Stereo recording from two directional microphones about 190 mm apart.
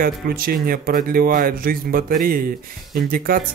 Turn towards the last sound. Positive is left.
turn(degrees=-50)  # may be behind; listen again after turning